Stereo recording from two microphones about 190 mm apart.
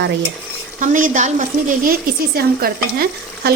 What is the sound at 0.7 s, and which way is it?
Speech, 45° right (ahead or behind).